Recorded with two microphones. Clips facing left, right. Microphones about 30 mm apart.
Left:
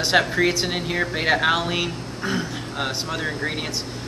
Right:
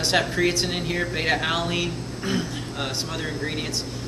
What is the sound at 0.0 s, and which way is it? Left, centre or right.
Speech, centre.